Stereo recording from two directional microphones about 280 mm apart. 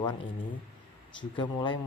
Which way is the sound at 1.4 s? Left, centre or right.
Centre.